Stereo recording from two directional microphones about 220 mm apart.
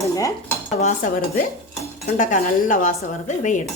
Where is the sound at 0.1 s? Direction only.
15° left (ahead or behind).